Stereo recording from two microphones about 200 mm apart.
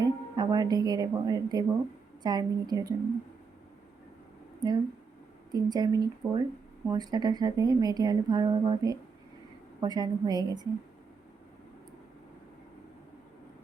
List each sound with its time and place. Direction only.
0.0 s a woman's voice: 20° right (ahead or behind)
4.6 s a woman's voice: 20° right (ahead or behind)